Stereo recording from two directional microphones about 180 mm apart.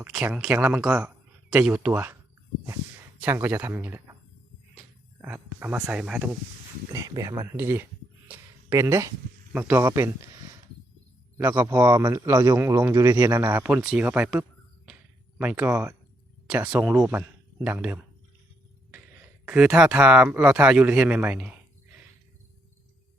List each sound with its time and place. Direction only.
0.0 s a man's voice: 5° right (ahead or behind)
3.2 s a man's voice: 10° right (ahead or behind)
5.2 s a man's voice: 10° right (ahead or behind)
6.9 s a man's voice: 20° right (ahead or behind)
8.3 s a sound: 15° right (ahead or behind)
9.5 s a man's voice: 5° right (ahead or behind)
19.5 s a man's voice: 5° right (ahead or behind)